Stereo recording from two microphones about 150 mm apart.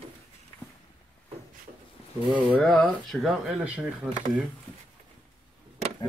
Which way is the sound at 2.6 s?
Centre (ahead or behind).